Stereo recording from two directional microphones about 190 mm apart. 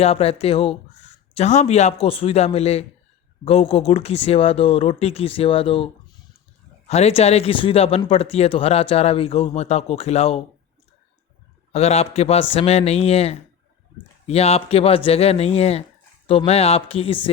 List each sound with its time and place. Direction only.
0.0 s speech: 30° left (ahead or behind)
11.7 s speech: 35° left (ahead or behind)